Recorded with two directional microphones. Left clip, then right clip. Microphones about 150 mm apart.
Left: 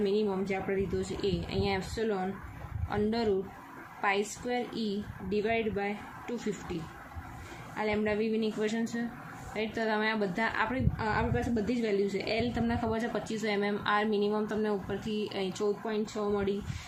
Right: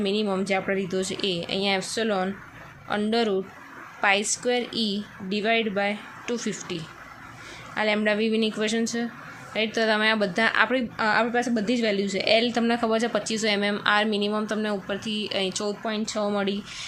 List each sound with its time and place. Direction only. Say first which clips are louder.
0.0 s speech: right 4 dB; 40° right (ahead or behind)
2.9 s a woman's voice: right 6 dB; 40° right (ahead or behind)
7.8 s a woman's voice: right 7 dB; 50° right (ahead or behind); by 15.7 s 30° right (ahead or behind)
15.9 s speech: right 5 dB; 55° right (ahead or behind)